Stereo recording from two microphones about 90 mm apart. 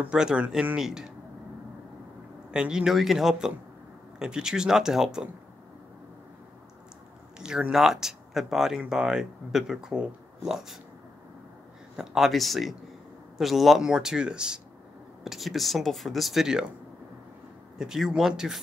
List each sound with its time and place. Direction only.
0.0 s speech: 10° right (ahead or behind)
2.5 s speech: 10° right (ahead or behind)
7.3 s speech: 10° right (ahead or behind)
12.0 s speech: 5° right (ahead or behind)
17.7 s speech: 5° right (ahead or behind)